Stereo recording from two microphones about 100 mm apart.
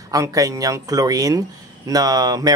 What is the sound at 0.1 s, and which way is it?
Speech, 35° right (ahead or behind).